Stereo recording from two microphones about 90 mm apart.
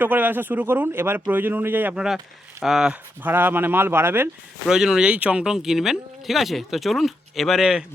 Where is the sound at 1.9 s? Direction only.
5° right (ahead or behind).